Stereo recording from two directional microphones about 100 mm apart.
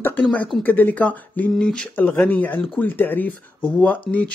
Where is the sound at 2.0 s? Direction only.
20° left (ahead or behind).